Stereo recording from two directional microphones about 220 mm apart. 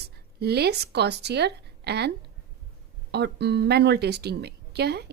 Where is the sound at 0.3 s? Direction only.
45° right (ahead or behind).